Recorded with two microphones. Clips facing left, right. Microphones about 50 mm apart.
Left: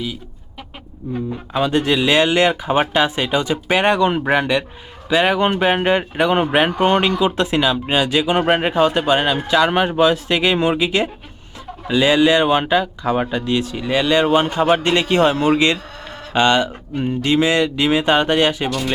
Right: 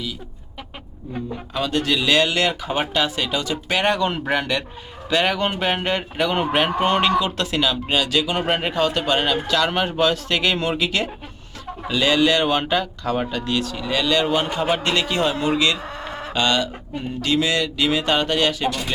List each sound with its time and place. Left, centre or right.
1.5 s speech: left
14.4 s a man's voice: centre
15.1 s speech: left